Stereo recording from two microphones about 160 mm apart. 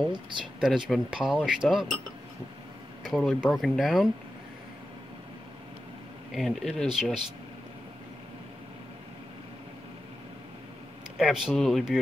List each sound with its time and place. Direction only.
0.1 s speech: 30° right (ahead or behind)
0.6 s speech: centre (ahead or behind)
3.0 s speech: centre (ahead or behind)
6.3 s speech: centre (ahead or behind)
11.1 s speech: centre (ahead or behind)